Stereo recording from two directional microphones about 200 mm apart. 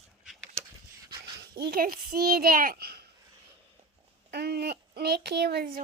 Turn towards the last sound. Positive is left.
turn(degrees=-50)  # may be behind; listen again after turning